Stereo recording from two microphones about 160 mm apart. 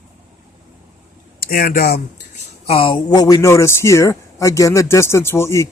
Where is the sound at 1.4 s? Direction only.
65° left (ahead or behind).